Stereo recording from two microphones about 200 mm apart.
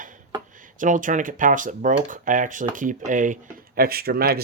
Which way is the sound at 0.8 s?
40° right (ahead or behind).